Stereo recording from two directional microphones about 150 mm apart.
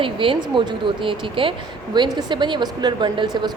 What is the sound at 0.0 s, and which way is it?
Speech, 35° right (ahead or behind).